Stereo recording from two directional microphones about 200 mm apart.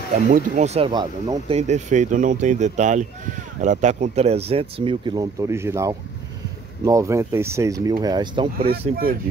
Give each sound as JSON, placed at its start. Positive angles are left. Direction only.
{"t": 0.3, "sound": "speech", "side_deg": -35}
{"t": 8.5, "sound": "speech", "side_deg": -50}